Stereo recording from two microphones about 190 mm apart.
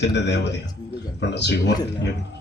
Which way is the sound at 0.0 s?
65° left (ahead or behind).